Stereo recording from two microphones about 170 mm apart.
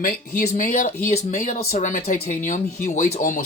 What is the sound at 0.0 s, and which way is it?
Speech, 50° left (ahead or behind).